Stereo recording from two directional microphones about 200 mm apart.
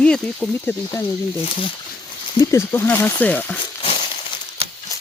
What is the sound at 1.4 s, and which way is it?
Speech, 25° left (ahead or behind).